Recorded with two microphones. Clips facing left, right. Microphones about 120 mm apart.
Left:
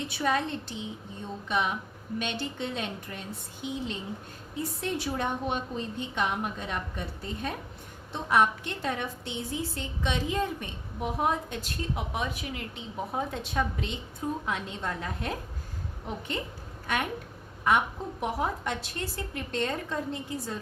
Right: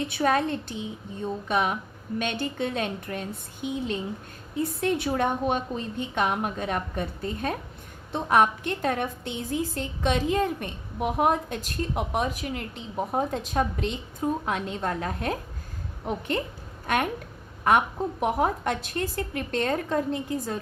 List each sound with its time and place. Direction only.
0.1 s a woman's voice: 55° right (ahead or behind)